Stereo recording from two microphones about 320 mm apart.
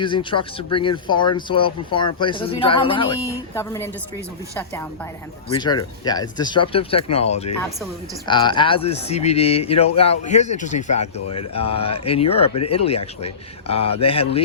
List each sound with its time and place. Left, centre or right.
0.0 s speech: centre